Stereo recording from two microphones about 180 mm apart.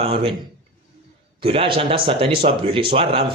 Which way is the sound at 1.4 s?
30° right (ahead or behind).